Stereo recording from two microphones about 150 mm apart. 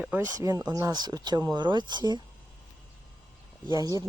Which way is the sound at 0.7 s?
25° right (ahead or behind).